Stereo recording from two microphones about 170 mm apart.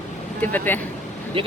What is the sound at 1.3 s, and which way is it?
Speech, 30° right (ahead or behind).